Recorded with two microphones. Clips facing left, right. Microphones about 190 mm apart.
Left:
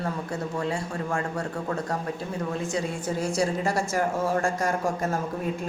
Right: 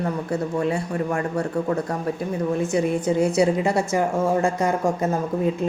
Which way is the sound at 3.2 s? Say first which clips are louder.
Right 6 dB; 60° right (ahead or behind).